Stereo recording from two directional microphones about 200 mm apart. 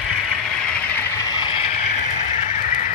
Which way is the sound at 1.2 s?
25° left (ahead or behind).